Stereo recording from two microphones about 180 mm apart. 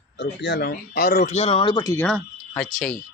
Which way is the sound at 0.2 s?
70° left (ahead or behind).